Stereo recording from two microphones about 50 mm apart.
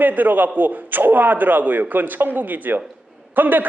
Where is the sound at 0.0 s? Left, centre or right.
Right.